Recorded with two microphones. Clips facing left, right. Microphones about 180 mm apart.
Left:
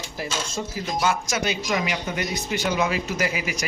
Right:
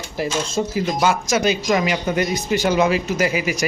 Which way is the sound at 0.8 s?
90° right.